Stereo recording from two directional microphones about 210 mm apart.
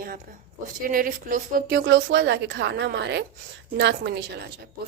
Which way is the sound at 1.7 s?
55° right (ahead or behind).